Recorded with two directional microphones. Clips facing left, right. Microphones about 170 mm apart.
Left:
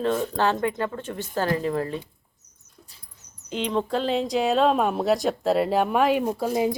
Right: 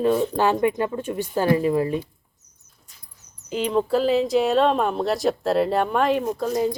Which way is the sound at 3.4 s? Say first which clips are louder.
Right 3 dB; 5° right (ahead or behind).